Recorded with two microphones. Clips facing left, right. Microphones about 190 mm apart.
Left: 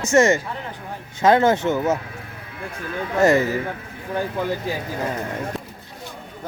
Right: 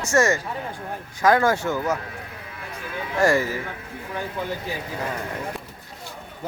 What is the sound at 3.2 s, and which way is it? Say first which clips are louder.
Speech: left 3 dB; 20° left (ahead or behind).